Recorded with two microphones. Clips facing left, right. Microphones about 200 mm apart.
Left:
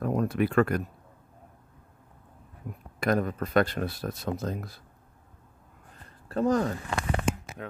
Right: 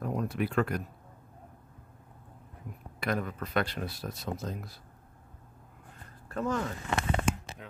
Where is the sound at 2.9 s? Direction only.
45° left (ahead or behind).